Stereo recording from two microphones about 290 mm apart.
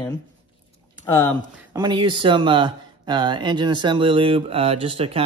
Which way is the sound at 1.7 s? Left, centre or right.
Centre.